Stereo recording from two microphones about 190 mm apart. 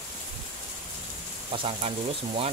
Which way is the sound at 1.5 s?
30° right (ahead or behind).